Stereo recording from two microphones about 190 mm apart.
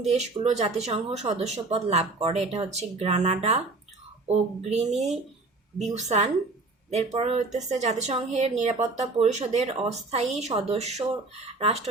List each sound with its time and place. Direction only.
0.0 s speech: 35° right (ahead or behind)